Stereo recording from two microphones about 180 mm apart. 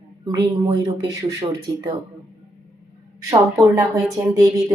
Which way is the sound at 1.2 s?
20° right (ahead or behind).